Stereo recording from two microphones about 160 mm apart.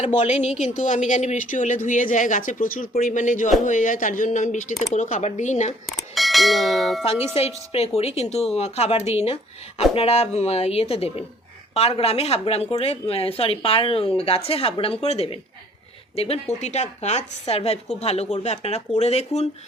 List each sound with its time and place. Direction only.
0.0 s speech: 45° left (ahead or behind)
6.0 s speech: centre (ahead or behind)
7.3 s a woman's voice: 40° left (ahead or behind)